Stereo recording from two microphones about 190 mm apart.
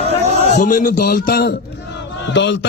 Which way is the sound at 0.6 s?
45° left (ahead or behind).